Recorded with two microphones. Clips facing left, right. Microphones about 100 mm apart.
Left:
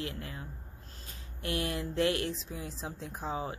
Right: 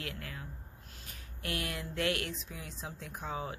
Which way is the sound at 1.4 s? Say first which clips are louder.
Left 4 dB; 25° left (ahead or behind).